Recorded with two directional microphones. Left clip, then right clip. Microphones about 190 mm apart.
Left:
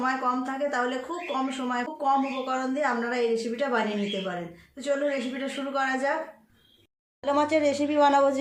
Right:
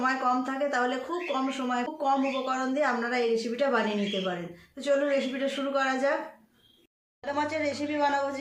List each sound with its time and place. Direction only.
0.0 s speech: centre (ahead or behind)
7.3 s a woman's voice: 35° left (ahead or behind)